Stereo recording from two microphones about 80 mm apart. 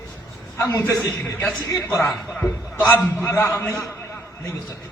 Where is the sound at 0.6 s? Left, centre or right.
Left.